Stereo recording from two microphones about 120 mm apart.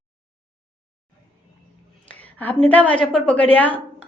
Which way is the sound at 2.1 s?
15° left (ahead or behind).